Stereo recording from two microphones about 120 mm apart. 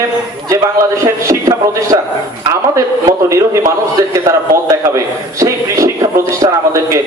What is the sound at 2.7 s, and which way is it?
A man's voice, 25° right (ahead or behind).